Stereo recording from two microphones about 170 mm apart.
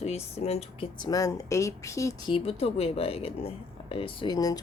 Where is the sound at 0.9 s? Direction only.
25° left (ahead or behind).